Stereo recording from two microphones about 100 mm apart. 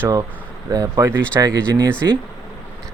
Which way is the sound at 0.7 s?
35° right (ahead or behind).